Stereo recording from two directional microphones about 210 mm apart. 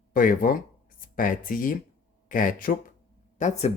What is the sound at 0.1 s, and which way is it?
Speech, 40° left (ahead or behind).